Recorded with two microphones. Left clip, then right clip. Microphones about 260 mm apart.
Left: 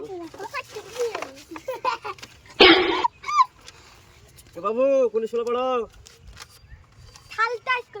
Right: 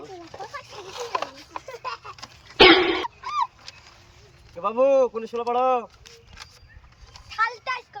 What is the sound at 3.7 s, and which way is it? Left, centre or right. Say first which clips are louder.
Dog: right 3 dB; centre.